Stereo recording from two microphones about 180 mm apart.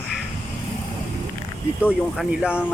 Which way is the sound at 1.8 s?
5° right (ahead or behind).